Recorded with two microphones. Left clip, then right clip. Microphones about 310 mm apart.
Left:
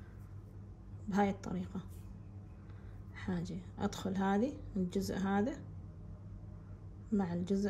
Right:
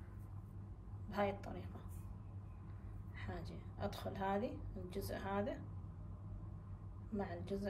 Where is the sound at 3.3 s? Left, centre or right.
Left.